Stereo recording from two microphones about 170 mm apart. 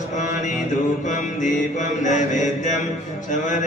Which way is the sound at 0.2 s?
45° left (ahead or behind).